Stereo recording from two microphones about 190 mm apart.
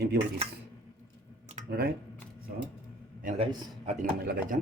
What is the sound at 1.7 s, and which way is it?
Speech, 55° right (ahead or behind).